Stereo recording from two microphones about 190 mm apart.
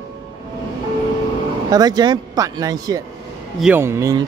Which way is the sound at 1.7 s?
20° right (ahead or behind).